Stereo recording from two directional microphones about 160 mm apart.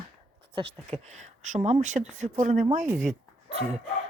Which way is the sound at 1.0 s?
50° right (ahead or behind).